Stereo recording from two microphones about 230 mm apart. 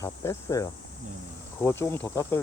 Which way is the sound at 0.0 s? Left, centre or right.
Centre.